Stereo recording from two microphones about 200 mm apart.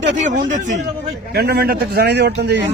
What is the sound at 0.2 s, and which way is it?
Speech, 40° right (ahead or behind).